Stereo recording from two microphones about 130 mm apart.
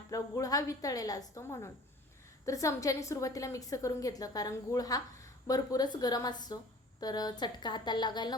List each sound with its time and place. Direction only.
0.1 s a woman's voice: 25° left (ahead or behind)